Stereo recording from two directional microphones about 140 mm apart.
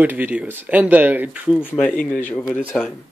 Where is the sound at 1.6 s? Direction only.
10° left (ahead or behind).